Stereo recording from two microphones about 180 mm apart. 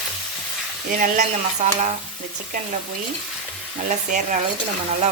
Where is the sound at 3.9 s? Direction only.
40° right (ahead or behind).